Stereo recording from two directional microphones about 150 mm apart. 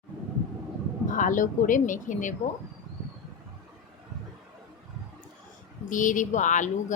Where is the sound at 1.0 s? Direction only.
60° left (ahead or behind).